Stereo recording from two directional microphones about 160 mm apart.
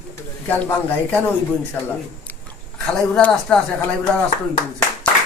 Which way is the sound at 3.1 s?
5° left (ahead or behind).